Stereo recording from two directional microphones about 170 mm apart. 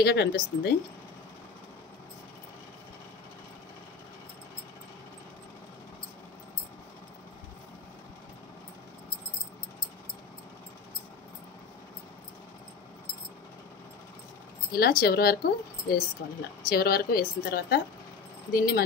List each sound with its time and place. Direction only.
0.0 s speech: 70° left (ahead or behind)
14.7 s speech: 65° left (ahead or behind)